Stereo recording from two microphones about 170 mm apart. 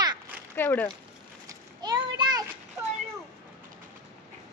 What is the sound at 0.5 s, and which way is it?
Speech, 10° left (ahead or behind).